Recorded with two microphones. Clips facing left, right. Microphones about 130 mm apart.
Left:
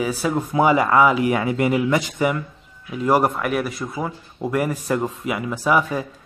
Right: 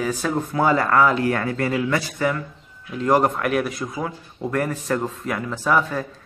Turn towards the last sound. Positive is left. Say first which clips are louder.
# left 1 dB
turn(degrees=10)  # may be behind; listen again after turning